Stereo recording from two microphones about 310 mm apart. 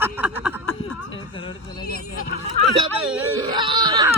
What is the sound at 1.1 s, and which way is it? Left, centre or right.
Speech, centre.